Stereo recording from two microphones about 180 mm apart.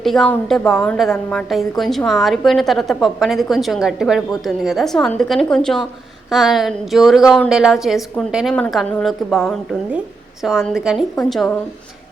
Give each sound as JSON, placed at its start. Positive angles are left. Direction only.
{"t": 0.0, "sound": "a woman's voice", "side_deg": 0}